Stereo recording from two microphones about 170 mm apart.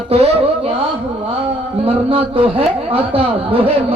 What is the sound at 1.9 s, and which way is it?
A man's voice, 35° right (ahead or behind).